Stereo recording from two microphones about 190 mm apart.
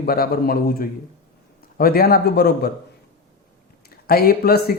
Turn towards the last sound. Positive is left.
turn(degrees=55)  # may be behind; listen again after turning